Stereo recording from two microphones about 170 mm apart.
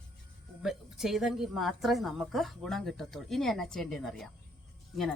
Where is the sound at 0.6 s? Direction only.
Centre (ahead or behind).